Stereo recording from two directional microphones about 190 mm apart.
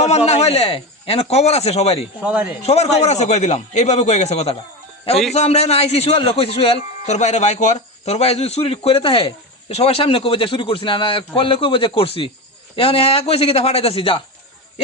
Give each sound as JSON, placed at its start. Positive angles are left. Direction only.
{"t": 0.3, "sound": "a man's voice", "side_deg": 35}
{"t": 2.2, "sound": "speech", "side_deg": -5}
{"t": 2.6, "sound": "a man's voice", "side_deg": 35}